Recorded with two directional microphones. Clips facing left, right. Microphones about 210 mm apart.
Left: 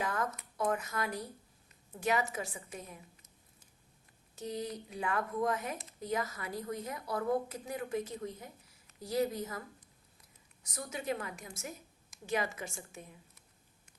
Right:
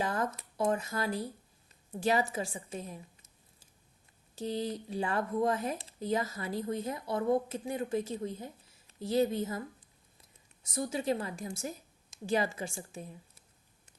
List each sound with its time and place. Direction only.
0.0 s a woman's voice: 30° right (ahead or behind)
4.4 s a woman's voice: 30° right (ahead or behind)